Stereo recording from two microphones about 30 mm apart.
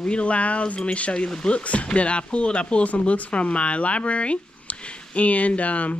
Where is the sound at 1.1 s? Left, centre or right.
Left.